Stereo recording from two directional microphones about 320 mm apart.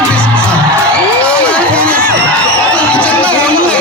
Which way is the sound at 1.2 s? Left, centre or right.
Centre.